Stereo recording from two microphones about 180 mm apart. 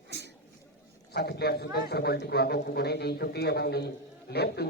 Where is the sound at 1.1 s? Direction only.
60° left (ahead or behind).